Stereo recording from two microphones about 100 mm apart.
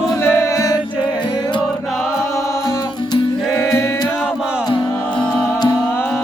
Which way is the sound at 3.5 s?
25° left (ahead or behind).